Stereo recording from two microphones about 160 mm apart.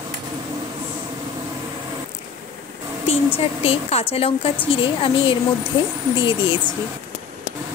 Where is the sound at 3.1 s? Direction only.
40° left (ahead or behind).